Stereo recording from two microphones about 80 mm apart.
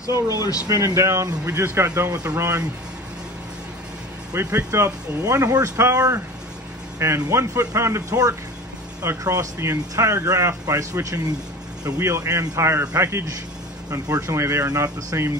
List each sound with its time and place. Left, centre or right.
0.0 s speech: left
0.7 s speech: right
4.3 s speech: right
9.2 s speech: right